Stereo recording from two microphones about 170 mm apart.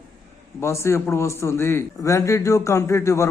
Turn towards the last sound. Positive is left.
turn(degrees=15)  # may be behind; listen again after turning